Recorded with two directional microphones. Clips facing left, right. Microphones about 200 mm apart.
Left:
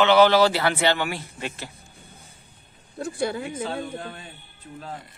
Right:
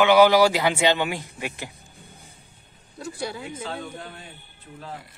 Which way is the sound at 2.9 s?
50° left (ahead or behind).